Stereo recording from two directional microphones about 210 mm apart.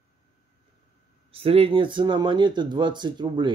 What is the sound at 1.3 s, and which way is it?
Speech, 25° right (ahead or behind).